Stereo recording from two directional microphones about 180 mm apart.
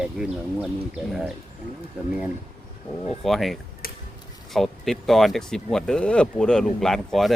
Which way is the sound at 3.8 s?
55° left (ahead or behind).